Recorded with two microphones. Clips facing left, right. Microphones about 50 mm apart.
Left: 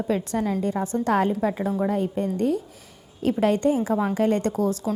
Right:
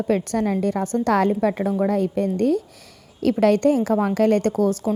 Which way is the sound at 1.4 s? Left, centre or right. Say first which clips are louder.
Right 3 dB; right.